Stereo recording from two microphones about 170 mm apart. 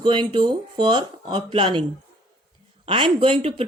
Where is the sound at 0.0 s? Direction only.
30° right (ahead or behind).